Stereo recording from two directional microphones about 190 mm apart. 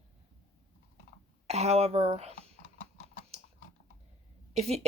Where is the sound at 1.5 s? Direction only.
35° right (ahead or behind).